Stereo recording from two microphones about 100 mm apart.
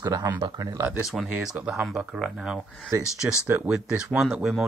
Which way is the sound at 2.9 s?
25° right (ahead or behind).